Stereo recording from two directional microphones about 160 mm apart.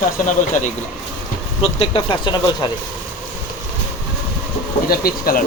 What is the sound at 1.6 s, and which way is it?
Speech, 35° left (ahead or behind).